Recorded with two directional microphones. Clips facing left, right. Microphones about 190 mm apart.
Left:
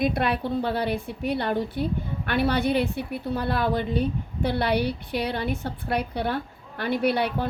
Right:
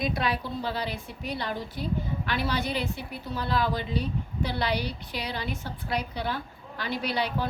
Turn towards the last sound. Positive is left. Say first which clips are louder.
# left 5 dB
turn(degrees=55)  # may be behind; listen again after turning